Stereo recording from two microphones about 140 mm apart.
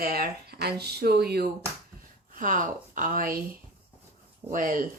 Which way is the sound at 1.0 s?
90° right.